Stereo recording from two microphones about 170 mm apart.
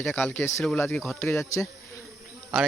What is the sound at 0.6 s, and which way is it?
Speech, centre (ahead or behind).